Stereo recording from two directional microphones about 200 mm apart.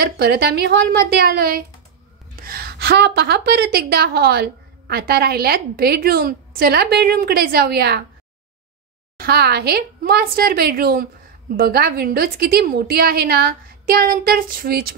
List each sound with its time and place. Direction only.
0.0 s a woman's voice: 50° right (ahead or behind)
9.2 s a woman's voice: 50° right (ahead or behind)